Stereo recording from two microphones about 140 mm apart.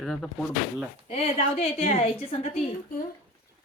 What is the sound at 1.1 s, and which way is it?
Speech, 45° left (ahead or behind).